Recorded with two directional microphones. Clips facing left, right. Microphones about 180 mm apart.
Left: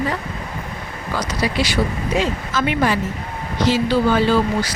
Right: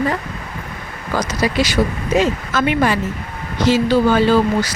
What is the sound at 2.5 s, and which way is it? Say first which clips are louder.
Speech: right 2 dB; 55° right (ahead or behind).